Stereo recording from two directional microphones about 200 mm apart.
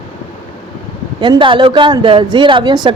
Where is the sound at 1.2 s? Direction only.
25° right (ahead or behind).